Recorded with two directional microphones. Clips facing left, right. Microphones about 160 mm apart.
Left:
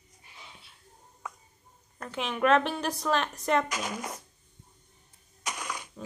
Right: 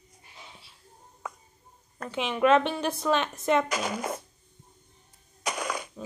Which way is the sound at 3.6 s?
65° right (ahead or behind).